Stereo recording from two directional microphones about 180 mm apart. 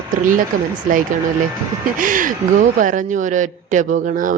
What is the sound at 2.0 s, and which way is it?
A woman's voice, 50° right (ahead or behind).